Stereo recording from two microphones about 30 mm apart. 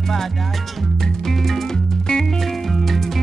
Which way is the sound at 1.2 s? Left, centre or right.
Centre.